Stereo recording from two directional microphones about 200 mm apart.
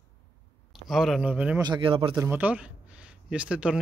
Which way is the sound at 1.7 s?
25° right (ahead or behind).